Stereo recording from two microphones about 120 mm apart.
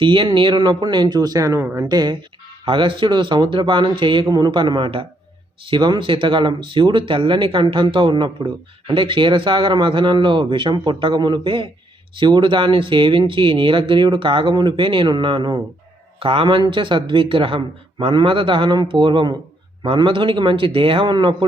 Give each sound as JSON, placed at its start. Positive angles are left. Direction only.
{"t": 0.0, "sound": "speech", "side_deg": -45}
{"t": 2.6, "sound": "speech", "side_deg": -45}